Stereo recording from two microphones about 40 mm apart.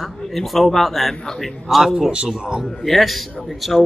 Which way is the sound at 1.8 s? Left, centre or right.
Centre.